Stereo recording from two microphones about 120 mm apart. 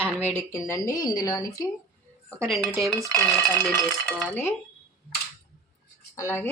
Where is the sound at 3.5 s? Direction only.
20° left (ahead or behind).